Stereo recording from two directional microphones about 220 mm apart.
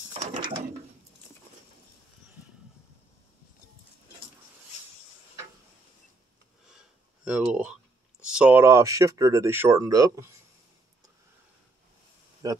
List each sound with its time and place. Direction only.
0.2 s a sound: 25° right (ahead or behind)
7.2 s speech: 5° right (ahead or behind)
12.4 s speech: 15° right (ahead or behind)